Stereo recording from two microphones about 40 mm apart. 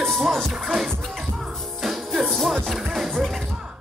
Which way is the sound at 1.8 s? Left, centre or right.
Centre.